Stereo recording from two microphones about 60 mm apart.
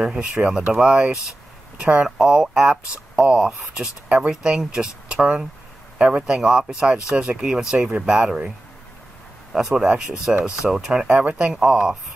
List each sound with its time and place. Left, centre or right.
0.0 s speech: centre
2.0 s speech: centre
9.5 s speech: centre
11.1 s speech: right